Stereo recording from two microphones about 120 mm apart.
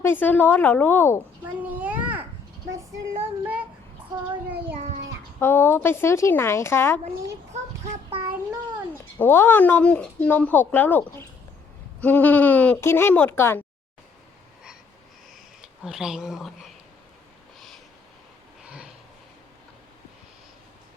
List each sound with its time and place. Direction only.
0.0 s speech: 15° left (ahead or behind)
1.6 s a sound: 10° right (ahead or behind)
3.4 s child singing: 15° right (ahead or behind)
5.4 s speech: 20° left (ahead or behind)
9.1 s speech: 20° left (ahead or behind)
15.6 s speech: 5° right (ahead or behind)
18.6 s a sound: 10° right (ahead or behind)